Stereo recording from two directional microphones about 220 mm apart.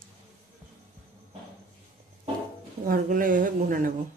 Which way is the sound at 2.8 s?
40° right (ahead or behind).